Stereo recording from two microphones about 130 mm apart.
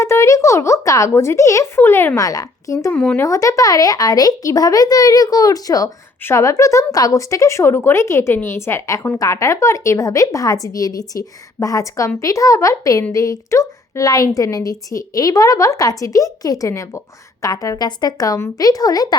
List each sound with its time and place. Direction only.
0.0 s a woman's voice: 20° left (ahead or behind)
2.9 s speech: 10° left (ahead or behind)
3.2 s a woman's voice: 25° left (ahead or behind)